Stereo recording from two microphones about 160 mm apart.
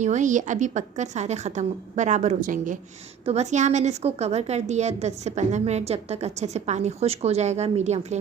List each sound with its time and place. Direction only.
0.0 s a woman's voice: 50° right (ahead or behind)